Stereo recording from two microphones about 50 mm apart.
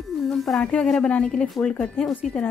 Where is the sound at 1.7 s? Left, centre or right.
Left.